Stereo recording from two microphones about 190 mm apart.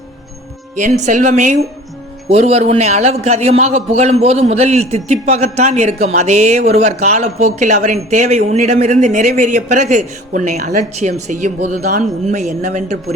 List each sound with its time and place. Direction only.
0.8 s a man's voice: 40° right (ahead or behind)